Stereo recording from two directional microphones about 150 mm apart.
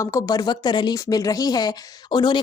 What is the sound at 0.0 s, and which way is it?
Speech, 20° left (ahead or behind).